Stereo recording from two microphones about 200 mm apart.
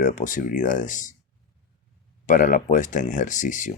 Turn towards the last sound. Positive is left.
turn(degrees=40)  # may be behind; listen again after turning